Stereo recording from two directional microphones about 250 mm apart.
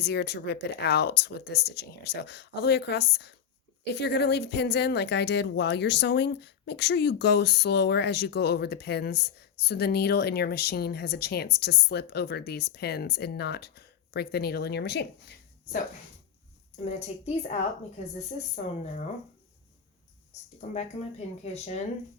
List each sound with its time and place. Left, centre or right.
0.0 s a woman's voice: left
16.8 s a woman's voice: left
21.4 s a woman's voice: left